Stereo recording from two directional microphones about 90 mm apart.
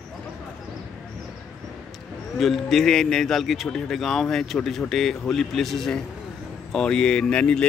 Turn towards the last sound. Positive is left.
turn(degrees=10)  # may be behind; listen again after turning